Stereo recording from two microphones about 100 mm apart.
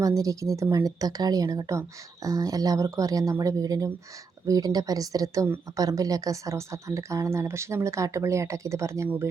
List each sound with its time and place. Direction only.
0.0 s speech: 35° right (ahead or behind)